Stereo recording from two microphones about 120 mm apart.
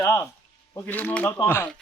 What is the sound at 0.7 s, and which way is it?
Speech, 15° left (ahead or behind).